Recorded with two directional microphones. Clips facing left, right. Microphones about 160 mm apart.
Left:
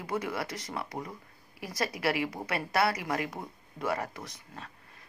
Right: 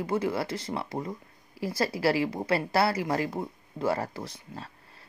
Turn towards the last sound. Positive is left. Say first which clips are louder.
# right 5 dB
turn(degrees=-30)  # may be behind; listen again after turning